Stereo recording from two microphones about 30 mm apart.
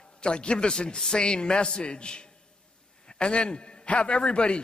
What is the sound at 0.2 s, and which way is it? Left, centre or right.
A man's voice, left.